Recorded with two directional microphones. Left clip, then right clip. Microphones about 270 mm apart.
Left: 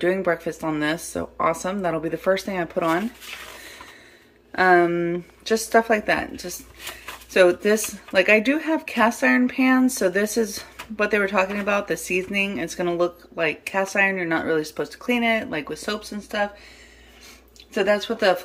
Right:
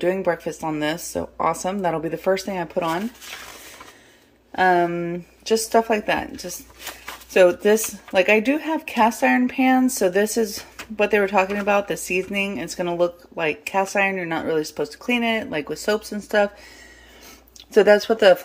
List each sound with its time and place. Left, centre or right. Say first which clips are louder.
0.0 s speech: even; centre
4.6 s speech: left 1 dB; centre
7.3 s speech: right 2 dB; centre
17.7 s speech: right 6 dB; centre